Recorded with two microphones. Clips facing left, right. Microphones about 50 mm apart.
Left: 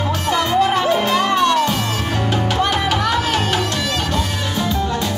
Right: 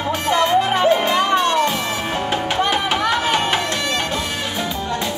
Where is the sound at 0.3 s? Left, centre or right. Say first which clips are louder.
Even; right.